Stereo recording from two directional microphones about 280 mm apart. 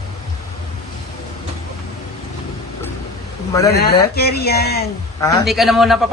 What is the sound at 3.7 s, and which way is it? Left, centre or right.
Speech, left.